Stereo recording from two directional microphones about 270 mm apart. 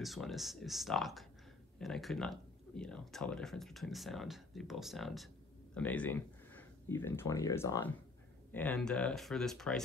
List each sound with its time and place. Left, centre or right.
0.0 s speech: centre